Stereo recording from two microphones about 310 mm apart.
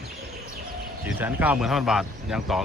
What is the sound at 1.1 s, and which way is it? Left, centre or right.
Speech, centre.